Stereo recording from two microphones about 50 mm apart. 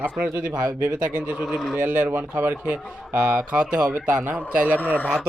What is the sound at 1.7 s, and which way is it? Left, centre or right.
Speech, right.